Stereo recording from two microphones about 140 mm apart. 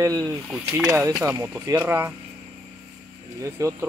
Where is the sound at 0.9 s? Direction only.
20° right (ahead or behind).